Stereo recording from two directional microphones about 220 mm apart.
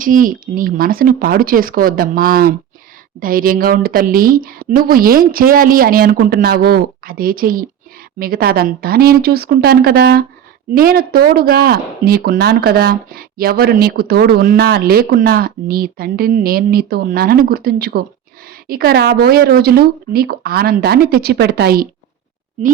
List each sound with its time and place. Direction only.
0.0 s a woman's voice: 40° right (ahead or behind)